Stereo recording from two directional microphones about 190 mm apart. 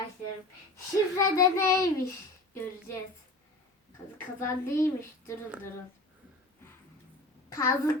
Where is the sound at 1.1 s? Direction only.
15° left (ahead or behind).